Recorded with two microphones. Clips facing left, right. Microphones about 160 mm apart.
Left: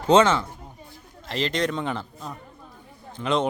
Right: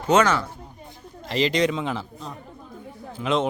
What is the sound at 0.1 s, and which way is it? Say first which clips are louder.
Speech: left 2 dB; 25° left (ahead or behind).